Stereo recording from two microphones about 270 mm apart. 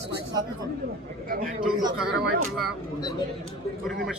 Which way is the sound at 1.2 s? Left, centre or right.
Right.